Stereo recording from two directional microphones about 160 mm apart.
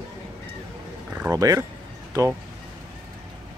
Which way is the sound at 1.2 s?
20° right (ahead or behind).